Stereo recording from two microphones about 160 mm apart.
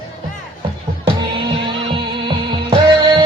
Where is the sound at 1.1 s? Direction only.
30° right (ahead or behind).